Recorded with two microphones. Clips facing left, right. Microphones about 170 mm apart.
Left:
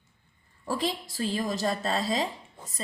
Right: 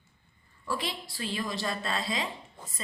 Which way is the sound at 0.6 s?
40° left (ahead or behind).